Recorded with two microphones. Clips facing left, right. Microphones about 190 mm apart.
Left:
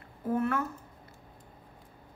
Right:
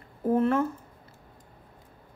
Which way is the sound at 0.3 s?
30° right (ahead or behind).